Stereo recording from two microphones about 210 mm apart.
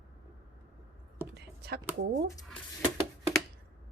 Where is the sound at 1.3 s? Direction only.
50° right (ahead or behind).